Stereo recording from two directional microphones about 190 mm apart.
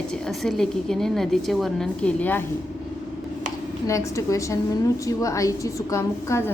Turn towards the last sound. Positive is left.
turn(degrees=15)  # may be behind; listen again after turning